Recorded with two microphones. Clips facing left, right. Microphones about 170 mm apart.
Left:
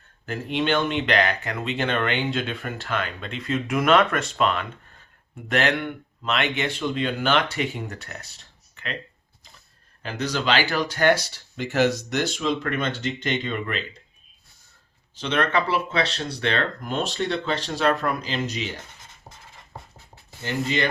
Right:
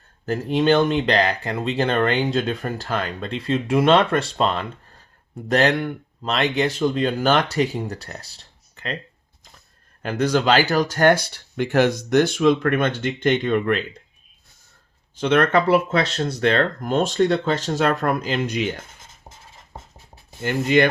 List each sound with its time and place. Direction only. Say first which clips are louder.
0.3 s speech: right 6 dB; 40° right (ahead or behind)
10.0 s speech: right 7 dB; 50° right (ahead or behind)
15.1 s speech: right 6 dB; 50° right (ahead or behind)
20.4 s speech: right 7 dB; 55° right (ahead or behind)